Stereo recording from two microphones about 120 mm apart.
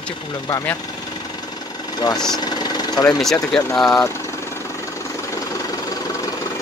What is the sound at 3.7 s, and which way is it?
Speech, 5° left (ahead or behind).